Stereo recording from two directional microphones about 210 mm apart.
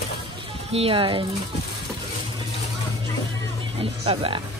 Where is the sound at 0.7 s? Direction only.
25° right (ahead or behind).